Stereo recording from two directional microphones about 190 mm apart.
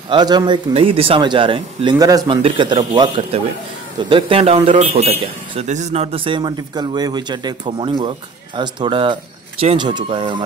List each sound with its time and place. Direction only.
0.1 s speech: 20° right (ahead or behind)